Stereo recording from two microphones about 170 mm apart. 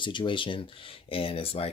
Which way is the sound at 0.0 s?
30° left (ahead or behind).